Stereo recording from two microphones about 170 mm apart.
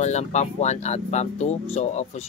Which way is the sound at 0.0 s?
40° left (ahead or behind).